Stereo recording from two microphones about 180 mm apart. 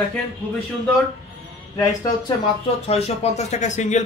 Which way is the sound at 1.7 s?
15° left (ahead or behind).